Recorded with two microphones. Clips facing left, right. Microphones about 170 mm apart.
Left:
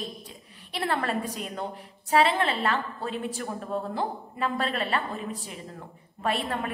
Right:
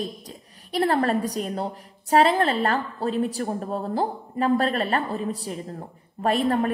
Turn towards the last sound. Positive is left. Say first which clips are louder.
# right 7 dB
turn(degrees=-40)  # may be behind; listen again after turning